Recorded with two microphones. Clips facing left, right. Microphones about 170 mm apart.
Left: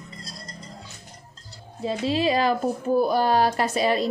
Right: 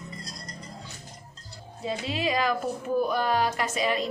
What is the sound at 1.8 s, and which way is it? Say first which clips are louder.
A woman's voice: left 6 dB; 30° left (ahead or behind).